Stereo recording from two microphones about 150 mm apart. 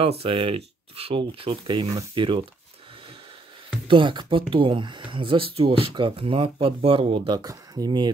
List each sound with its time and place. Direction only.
0.2 s speech: 35° right (ahead or behind)
3.8 s speech: 35° right (ahead or behind)